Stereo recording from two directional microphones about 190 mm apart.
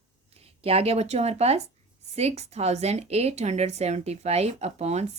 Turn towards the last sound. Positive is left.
turn(degrees=-35)  # may be behind; listen again after turning